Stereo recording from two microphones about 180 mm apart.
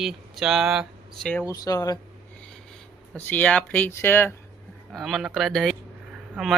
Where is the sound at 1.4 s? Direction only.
20° left (ahead or behind).